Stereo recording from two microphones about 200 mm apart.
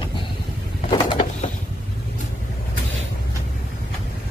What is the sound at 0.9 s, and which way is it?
Bird, 25° left (ahead or behind).